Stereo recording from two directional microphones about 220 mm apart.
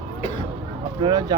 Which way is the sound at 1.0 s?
20° right (ahead or behind).